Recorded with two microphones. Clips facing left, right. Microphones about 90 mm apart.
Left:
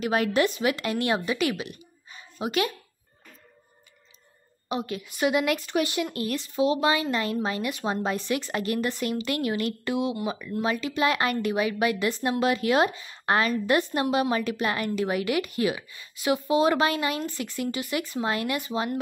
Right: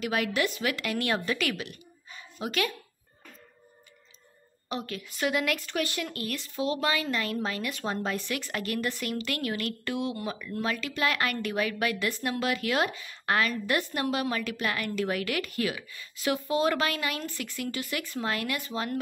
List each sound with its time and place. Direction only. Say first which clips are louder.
0.0 s a woman's voice: left 5 dB; 30° left (ahead or behind)
4.6 s a woman's voice: left 4 dB; 20° left (ahead or behind)